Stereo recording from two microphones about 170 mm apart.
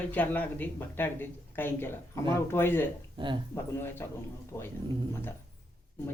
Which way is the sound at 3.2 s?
30° right (ahead or behind).